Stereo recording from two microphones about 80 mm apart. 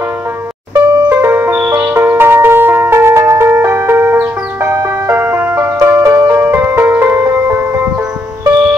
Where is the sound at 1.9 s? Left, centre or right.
Right.